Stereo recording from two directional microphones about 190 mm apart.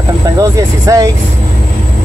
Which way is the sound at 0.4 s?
20° right (ahead or behind).